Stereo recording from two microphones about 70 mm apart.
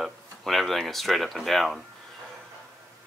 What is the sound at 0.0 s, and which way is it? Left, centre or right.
Speech, centre.